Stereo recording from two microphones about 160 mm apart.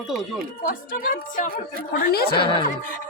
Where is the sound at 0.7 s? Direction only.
60° left (ahead or behind).